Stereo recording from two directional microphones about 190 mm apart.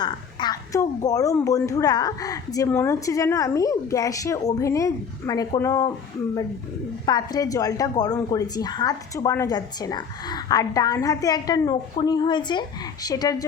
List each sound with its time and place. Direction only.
0.0 s a woman's voice: 20° left (ahead or behind)
7.0 s a woman's voice: 20° left (ahead or behind)